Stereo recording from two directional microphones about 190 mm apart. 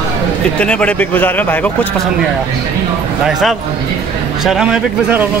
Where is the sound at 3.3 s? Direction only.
Centre (ahead or behind).